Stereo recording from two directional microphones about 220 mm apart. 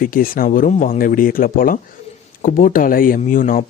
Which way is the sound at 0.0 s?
40° left (ahead or behind).